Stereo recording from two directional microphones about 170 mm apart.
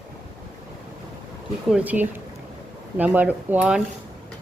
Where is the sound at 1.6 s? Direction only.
5° right (ahead or behind).